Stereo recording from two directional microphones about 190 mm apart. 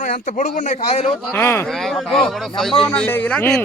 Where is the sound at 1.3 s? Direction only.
10° left (ahead or behind).